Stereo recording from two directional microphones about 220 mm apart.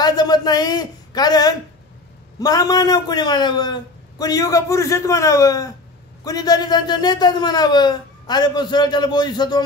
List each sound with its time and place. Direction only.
0.0 s a man's voice: 20° left (ahead or behind)